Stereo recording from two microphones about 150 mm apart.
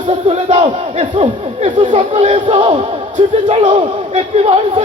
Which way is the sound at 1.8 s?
55° right (ahead or behind).